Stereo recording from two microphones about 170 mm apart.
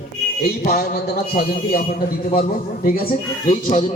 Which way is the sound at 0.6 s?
60° left (ahead or behind).